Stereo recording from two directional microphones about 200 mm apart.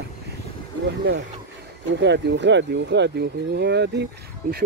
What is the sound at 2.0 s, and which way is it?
Speech, 60° right (ahead or behind).